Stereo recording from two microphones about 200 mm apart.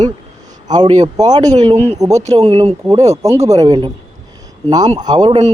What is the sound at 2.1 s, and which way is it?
Speech, 35° right (ahead or behind).